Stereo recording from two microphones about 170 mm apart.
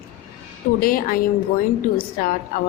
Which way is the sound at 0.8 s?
60° left (ahead or behind).